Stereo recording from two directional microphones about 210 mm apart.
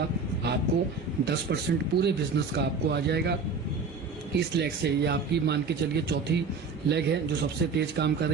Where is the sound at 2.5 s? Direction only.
50° right (ahead or behind).